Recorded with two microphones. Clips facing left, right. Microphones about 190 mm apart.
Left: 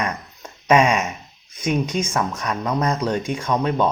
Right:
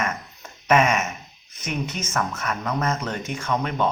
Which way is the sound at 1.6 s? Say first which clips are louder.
Left 7 dB; 10° left (ahead or behind).